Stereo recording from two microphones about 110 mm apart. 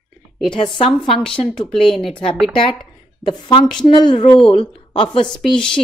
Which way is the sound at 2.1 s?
50° left (ahead or behind).